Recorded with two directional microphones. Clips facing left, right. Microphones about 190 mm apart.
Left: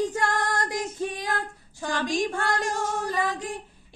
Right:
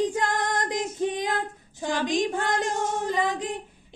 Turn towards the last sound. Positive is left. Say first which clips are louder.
# right 2 dB
turn(degrees=-20)  # may be behind; listen again after turning